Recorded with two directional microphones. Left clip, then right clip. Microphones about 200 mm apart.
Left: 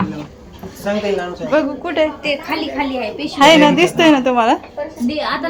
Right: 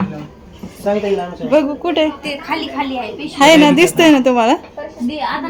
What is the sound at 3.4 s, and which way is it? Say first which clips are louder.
A woman's voice: right 1 dB; 30° right (ahead or behind).